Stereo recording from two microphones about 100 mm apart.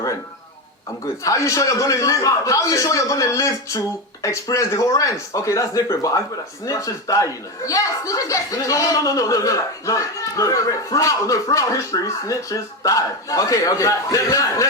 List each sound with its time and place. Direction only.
1.2 s speech: 30° left (ahead or behind)